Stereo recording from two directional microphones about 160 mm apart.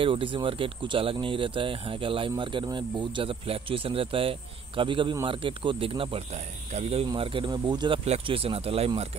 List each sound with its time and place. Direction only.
0.0 s speech: 35° right (ahead or behind)
7.1 s speech: 30° right (ahead or behind)